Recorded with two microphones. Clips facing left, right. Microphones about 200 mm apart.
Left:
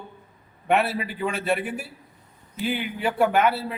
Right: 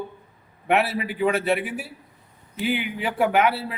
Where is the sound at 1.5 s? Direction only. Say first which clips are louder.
Right 1 dB; 5° right (ahead or behind).